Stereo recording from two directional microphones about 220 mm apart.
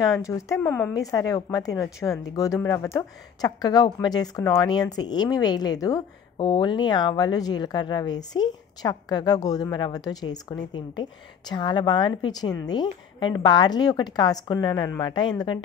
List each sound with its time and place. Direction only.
0.0 s speech: 15° left (ahead or behind)